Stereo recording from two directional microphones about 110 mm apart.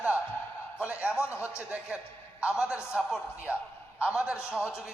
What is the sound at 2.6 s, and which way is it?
A man's voice, 10° right (ahead or behind).